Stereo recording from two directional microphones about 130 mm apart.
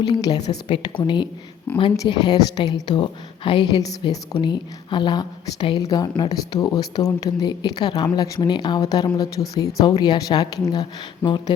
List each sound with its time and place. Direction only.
0.0 s a woman's voice: 30° left (ahead or behind)